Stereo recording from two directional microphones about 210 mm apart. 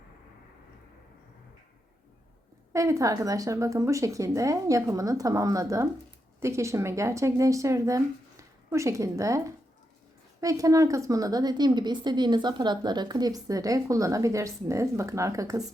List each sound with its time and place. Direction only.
2.7 s a woman's voice: 15° right (ahead or behind)
10.4 s a woman's voice: 15° right (ahead or behind)